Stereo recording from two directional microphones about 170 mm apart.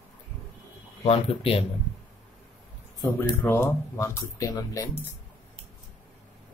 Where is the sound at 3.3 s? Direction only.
15° left (ahead or behind).